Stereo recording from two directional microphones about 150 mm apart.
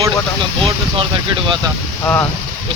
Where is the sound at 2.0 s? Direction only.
15° left (ahead or behind).